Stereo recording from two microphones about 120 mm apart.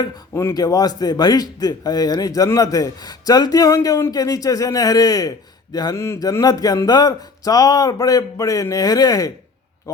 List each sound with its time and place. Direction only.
0.0 s speech: 35° left (ahead or behind)